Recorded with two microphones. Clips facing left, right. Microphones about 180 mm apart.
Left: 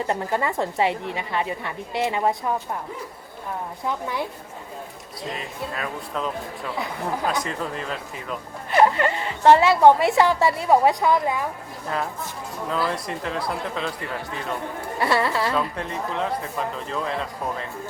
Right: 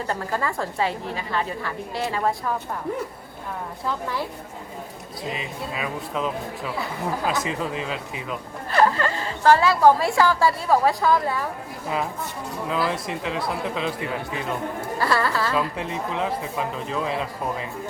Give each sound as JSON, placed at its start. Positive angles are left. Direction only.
{"t": 0.1, "sound": "a woman's voice", "side_deg": 25}
{"t": 5.3, "sound": "speech", "side_deg": 0}
{"t": 8.7, "sound": "a woman's voice", "side_deg": 25}
{"t": 12.6, "sound": "speech", "side_deg": -5}
{"t": 14.9, "sound": "a woman's voice", "side_deg": 25}
{"t": 15.5, "sound": "speech", "side_deg": -5}